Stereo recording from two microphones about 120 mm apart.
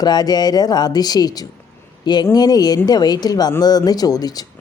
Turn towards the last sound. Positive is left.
turn(degrees=30)  # may be behind; listen again after turning